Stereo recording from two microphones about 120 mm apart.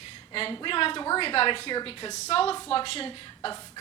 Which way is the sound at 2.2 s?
60° left (ahead or behind).